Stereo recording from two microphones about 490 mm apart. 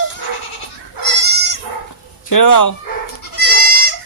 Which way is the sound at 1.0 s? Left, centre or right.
Left.